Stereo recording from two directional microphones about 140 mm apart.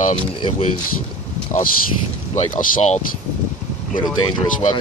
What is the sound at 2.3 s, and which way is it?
Speech, 60° left (ahead or behind).